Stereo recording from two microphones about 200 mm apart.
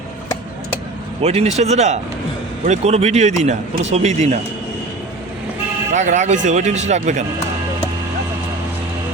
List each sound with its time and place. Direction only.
1.2 s a man's voice: 30° right (ahead or behind)
5.9 s a man's voice: 40° right (ahead or behind)